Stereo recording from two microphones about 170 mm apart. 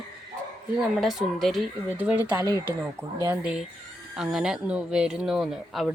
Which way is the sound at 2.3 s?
20° right (ahead or behind).